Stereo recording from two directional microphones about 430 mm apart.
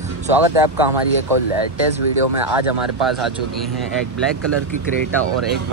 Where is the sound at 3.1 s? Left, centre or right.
Centre.